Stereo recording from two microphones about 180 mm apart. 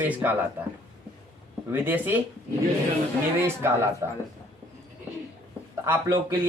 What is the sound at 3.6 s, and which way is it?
Speech, 15° right (ahead or behind).